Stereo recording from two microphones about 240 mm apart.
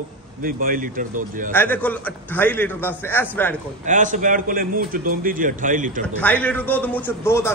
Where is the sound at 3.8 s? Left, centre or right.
Right.